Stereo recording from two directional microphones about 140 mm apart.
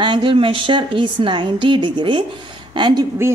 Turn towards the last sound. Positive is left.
turn(degrees=-35)  # may be behind; listen again after turning